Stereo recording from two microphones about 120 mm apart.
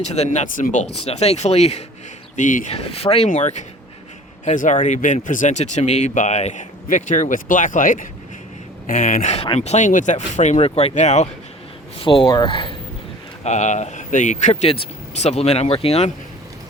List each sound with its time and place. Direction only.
0.0 s speech: 65° left (ahead or behind)
2.3 s speech: 90° left
4.4 s speech: 90° left
9.0 s speech: 70° left (ahead or behind)
11.9 s speech: 45° left (ahead or behind)
13.4 s speech: 75° left (ahead or behind); by 16.1 s 60° left (ahead or behind)